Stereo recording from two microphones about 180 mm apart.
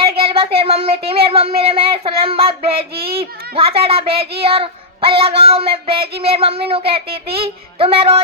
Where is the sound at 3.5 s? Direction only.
30° right (ahead or behind).